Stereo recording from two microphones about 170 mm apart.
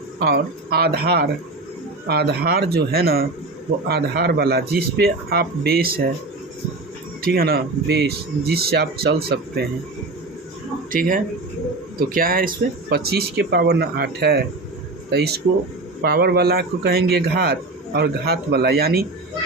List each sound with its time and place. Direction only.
0.2 s a man's voice: 70° right (ahead or behind)
7.2 s a man's voice: 60° right (ahead or behind)
10.9 s speech: 55° right (ahead or behind)
12.9 s a man's voice: 70° right (ahead or behind)